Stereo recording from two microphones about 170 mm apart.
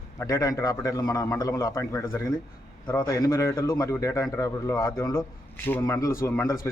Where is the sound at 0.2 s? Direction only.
20° left (ahead or behind).